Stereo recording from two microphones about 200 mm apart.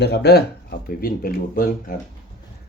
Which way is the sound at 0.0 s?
55° left (ahead or behind).